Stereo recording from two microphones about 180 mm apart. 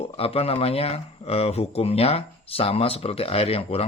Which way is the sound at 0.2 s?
35° left (ahead or behind).